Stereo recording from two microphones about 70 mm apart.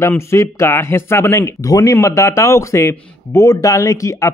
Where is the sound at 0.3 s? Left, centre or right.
Left.